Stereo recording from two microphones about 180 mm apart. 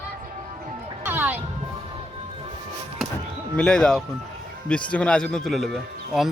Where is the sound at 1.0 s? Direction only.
10° right (ahead or behind).